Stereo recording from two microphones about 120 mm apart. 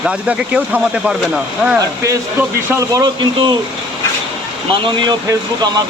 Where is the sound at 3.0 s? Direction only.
40° right (ahead or behind).